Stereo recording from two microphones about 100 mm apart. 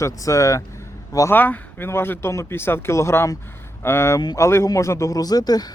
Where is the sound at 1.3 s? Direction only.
20° left (ahead or behind); by 5.6 s 40° left (ahead or behind).